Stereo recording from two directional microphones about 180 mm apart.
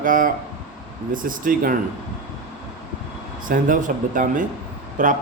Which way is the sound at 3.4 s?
50° right (ahead or behind).